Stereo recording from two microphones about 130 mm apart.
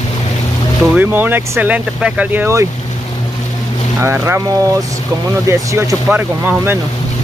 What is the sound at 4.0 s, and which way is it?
Speech, 20° right (ahead or behind).